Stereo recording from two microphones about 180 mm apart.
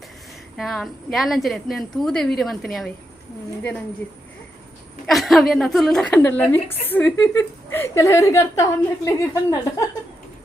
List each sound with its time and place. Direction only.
0.5 s a woman's voice: centre (ahead or behind)
5.0 s a woman's voice: centre (ahead or behind); by 9.8 s 15° left (ahead or behind)